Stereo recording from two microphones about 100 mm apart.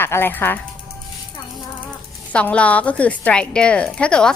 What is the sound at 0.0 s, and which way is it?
Speech, 20° left (ahead or behind).